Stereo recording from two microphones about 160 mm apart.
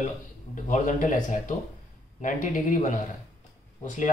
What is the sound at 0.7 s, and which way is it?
Speech, 55° left (ahead or behind).